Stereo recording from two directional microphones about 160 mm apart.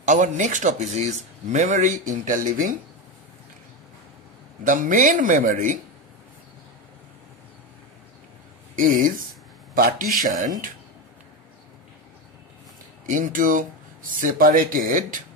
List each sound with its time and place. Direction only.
0.0 s speech: 50° right (ahead or behind)
4.6 s speech: 55° right (ahead or behind)
8.7 s speech: 55° right (ahead or behind)
13.0 s speech: 55° right (ahead or behind)